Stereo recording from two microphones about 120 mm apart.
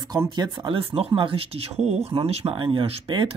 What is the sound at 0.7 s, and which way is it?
Speech, 50° right (ahead or behind).